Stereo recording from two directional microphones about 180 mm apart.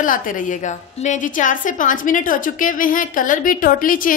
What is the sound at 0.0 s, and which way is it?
A woman's voice, 45° left (ahead or behind).